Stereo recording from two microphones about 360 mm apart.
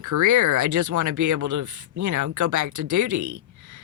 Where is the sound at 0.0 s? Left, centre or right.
Right.